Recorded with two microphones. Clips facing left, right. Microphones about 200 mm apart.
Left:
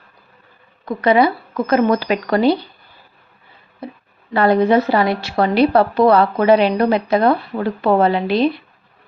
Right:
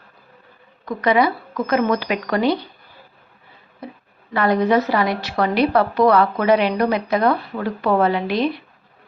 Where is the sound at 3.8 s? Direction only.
30° left (ahead or behind).